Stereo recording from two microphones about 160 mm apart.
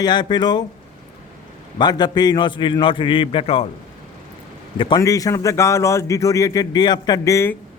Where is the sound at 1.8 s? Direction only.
25° left (ahead or behind).